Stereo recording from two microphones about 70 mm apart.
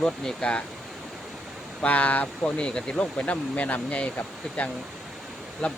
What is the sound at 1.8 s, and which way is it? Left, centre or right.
Speech, centre.